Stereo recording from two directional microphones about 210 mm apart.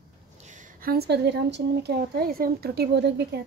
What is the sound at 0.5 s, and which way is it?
A woman's voice, 40° right (ahead or behind).